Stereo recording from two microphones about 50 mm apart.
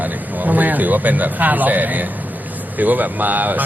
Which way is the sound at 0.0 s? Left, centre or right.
Right.